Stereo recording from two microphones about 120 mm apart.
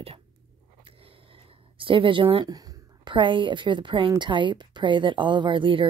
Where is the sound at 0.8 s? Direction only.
45° right (ahead or behind).